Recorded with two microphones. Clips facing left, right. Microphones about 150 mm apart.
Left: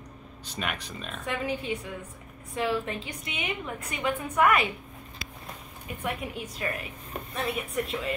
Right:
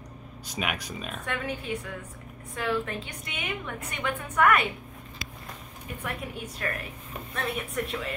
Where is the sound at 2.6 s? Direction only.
25° left (ahead or behind).